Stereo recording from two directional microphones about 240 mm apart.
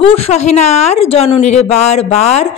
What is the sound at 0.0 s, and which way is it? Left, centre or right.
A woman's voice, left.